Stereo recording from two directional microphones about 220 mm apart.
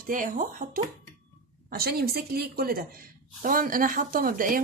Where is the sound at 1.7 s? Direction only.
45° right (ahead or behind).